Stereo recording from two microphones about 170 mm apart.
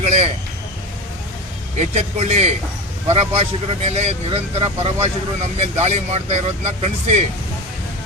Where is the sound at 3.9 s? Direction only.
40° right (ahead or behind).